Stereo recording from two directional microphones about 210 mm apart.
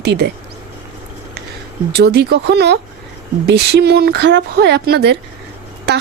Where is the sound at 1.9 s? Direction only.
50° right (ahead or behind).